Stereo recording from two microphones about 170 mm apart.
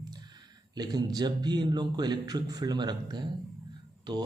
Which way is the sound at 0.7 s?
25° right (ahead or behind).